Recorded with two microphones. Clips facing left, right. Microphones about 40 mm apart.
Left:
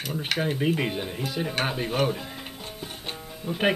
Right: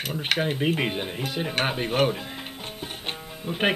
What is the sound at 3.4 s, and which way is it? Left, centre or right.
Speech, right.